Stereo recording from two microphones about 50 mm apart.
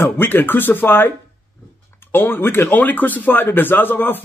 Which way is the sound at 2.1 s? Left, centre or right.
Left.